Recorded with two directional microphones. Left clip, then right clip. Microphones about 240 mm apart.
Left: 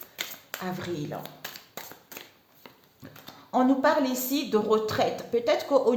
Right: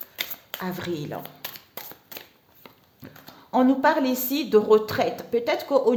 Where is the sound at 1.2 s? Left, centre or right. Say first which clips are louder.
Right 1 dB; right.